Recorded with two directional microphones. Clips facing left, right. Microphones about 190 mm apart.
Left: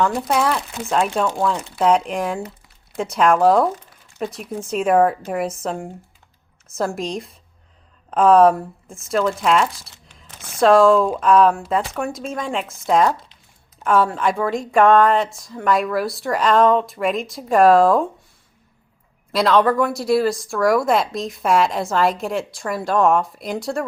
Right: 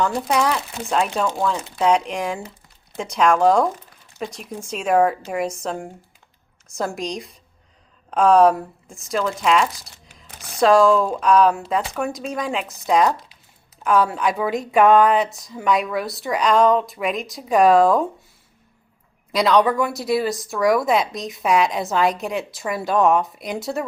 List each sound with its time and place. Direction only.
0.0 s speech: centre (ahead or behind)
9.9 s a sound: 10° right (ahead or behind)
10.6 s speech: centre (ahead or behind)
19.3 s speech: centre (ahead or behind)